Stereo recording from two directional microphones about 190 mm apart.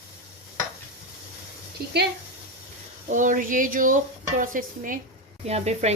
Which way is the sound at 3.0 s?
45° right (ahead or behind).